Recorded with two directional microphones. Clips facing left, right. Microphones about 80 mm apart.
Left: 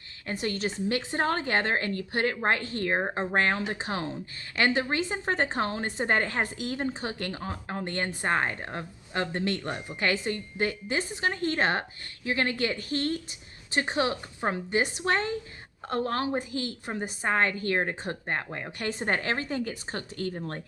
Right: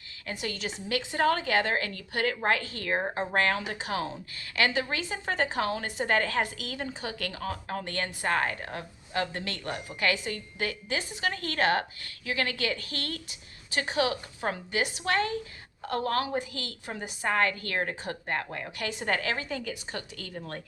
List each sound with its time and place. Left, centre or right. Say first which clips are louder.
0.3 s a woman's voice: left 4 dB; left
18.8 s a woman's voice: left 1 dB; left